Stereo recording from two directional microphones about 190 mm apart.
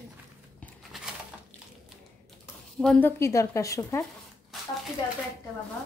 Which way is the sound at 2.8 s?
5° left (ahead or behind).